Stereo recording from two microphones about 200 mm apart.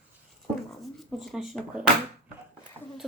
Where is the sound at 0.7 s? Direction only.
Centre (ahead or behind).